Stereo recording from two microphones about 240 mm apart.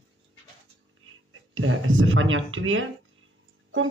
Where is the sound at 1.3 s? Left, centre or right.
Right.